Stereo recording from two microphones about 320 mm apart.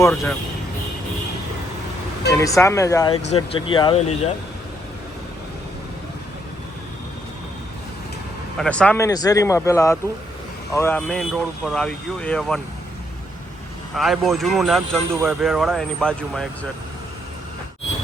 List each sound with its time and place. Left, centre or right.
0.0 s speech: centre
2.3 s speech: centre
8.5 s speech: centre
13.9 s speech: centre